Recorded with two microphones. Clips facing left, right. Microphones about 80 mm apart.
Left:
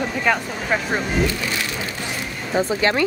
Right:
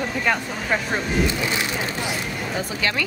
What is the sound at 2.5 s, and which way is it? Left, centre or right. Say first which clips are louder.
Speech: left 8 dB; left.